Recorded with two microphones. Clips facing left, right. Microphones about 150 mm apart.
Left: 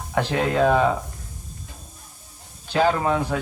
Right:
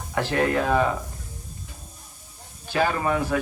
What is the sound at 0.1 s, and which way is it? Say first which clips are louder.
Speech: left 1 dB; 15° left (ahead or behind).